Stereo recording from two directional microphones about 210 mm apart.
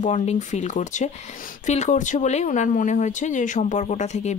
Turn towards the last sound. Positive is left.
turn(degrees=35)  # may be behind; listen again after turning